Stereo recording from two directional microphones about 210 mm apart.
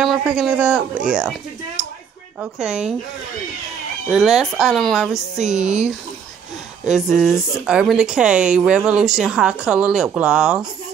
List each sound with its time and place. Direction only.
0.0 s speech: 5° right (ahead or behind)
2.4 s speech: 5° right (ahead or behind)
4.1 s speech: centre (ahead or behind)
5.4 s speech: 35° right (ahead or behind)
6.8 s speech: centre (ahead or behind)